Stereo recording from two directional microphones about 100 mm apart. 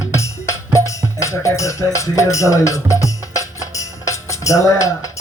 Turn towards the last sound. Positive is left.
turn(degrees=35)  # may be behind; listen again after turning